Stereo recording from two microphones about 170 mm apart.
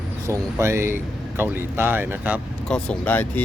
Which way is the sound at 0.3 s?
15° right (ahead or behind).